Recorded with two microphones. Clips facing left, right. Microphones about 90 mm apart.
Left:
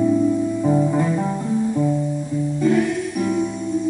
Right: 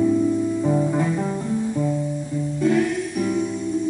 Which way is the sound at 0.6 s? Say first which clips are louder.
Left 2 dB; 5° left (ahead or behind).